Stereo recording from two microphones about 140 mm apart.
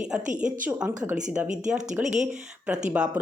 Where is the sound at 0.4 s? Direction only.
70° right (ahead or behind).